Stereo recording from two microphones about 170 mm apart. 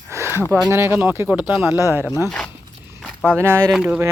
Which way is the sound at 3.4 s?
15° right (ahead or behind).